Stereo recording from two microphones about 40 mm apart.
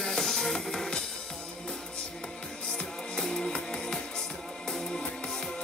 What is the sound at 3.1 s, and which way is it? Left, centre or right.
Music, centre.